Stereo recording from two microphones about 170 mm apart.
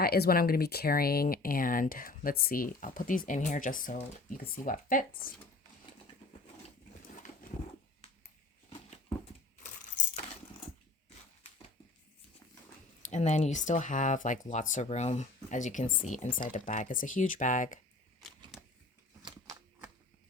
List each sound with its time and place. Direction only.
0.0 s speech: 65° left (ahead or behind)
13.0 s speech: 45° left (ahead or behind)